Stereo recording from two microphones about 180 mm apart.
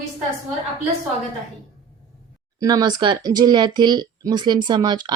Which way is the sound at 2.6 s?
20° right (ahead or behind).